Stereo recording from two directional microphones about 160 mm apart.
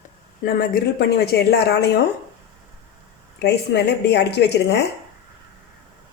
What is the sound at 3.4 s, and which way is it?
Speech, 90° left.